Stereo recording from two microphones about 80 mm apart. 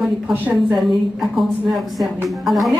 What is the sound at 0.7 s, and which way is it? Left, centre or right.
A woman's voice, centre.